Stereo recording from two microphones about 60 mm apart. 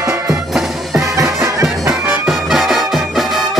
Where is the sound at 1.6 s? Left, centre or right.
Centre.